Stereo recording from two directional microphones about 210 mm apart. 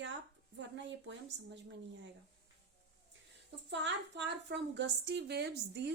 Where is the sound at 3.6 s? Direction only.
55° right (ahead or behind).